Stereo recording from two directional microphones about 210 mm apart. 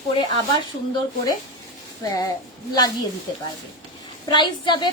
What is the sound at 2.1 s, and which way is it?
Speech, 15° left (ahead or behind).